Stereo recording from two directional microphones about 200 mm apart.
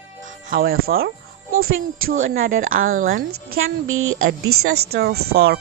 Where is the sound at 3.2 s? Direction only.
90° right.